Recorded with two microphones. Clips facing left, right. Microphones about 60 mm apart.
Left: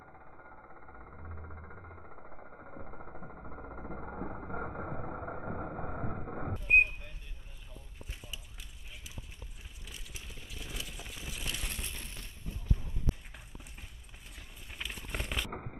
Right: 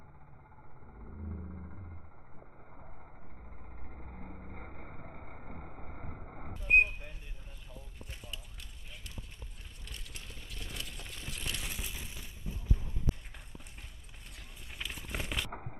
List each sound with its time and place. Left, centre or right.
1.5 s music: left
2.8 s vehicle: left
6.5 s a sound: centre
7.7 s vehicle: centre
9.8 s vehicle: centre
14.7 s a sound: centre